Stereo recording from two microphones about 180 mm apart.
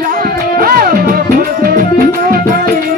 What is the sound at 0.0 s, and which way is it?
Music, 50° right (ahead or behind).